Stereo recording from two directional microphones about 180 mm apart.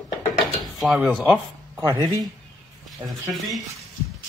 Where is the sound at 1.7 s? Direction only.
20° right (ahead or behind).